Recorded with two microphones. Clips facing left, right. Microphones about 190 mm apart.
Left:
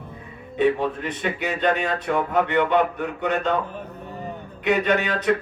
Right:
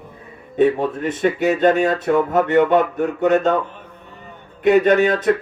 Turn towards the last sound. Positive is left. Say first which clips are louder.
# right 7 dB
turn(degrees=-45)  # may be behind; listen again after turning